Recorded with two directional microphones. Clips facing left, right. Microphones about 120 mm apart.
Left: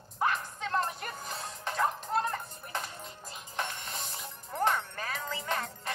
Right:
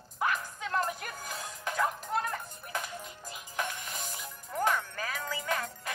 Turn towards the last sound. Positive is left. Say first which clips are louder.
# right 1 dB
turn(degrees=30)  # may be behind; listen again after turning